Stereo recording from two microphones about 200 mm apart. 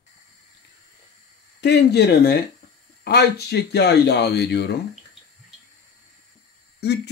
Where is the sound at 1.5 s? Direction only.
60° left (ahead or behind).